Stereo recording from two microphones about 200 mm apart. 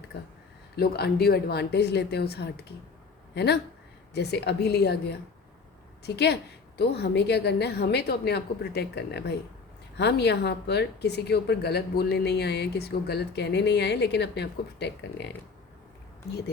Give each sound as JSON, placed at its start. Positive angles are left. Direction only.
{"t": 0.8, "sound": "a woman's voice", "side_deg": 55}
{"t": 6.1, "sound": "a woman's voice", "side_deg": 55}